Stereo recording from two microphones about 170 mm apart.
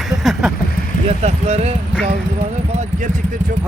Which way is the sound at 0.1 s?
Centre (ahead or behind).